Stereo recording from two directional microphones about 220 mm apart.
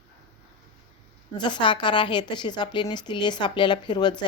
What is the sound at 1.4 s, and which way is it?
Speech, 20° left (ahead or behind).